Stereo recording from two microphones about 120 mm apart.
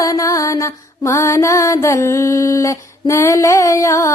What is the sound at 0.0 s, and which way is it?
Mantra, 25° left (ahead or behind).